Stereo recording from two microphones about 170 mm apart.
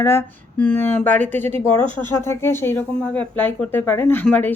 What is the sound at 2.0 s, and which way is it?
Speech, 15° left (ahead or behind).